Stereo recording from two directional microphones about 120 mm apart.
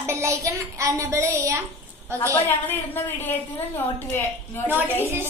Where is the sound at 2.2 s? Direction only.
20° left (ahead or behind).